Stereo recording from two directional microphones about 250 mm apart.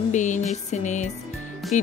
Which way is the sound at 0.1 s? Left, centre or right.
Left.